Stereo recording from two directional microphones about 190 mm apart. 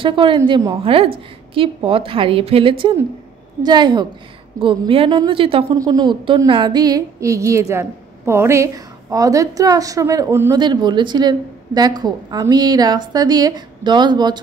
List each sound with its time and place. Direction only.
0.0 s a woman's voice: 25° right (ahead or behind)